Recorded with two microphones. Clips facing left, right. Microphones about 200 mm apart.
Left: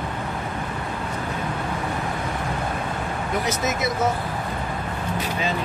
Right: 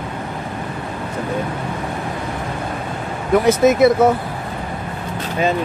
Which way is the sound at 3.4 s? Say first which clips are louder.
Right 16 dB; 55° right (ahead or behind).